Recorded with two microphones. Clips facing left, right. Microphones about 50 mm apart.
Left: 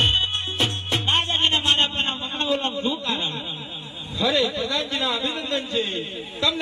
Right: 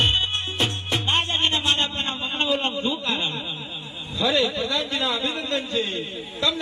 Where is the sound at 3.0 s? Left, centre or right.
Centre.